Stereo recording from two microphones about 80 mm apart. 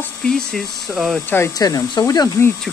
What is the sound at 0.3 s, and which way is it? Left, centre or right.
Speech, centre.